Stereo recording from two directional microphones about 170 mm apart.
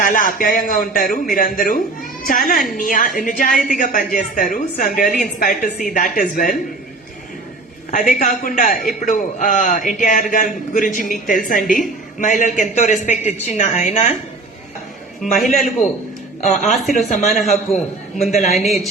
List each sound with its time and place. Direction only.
0.0 s a woman's voice: 55° left (ahead or behind)
7.9 s a woman's voice: 45° left (ahead or behind)
15.2 s speech: centre (ahead or behind)
17.1 s a woman's voice: 45° left (ahead or behind)
18.5 s speech: centre (ahead or behind)